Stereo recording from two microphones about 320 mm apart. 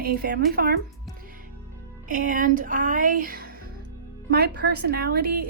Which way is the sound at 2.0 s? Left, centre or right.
Right.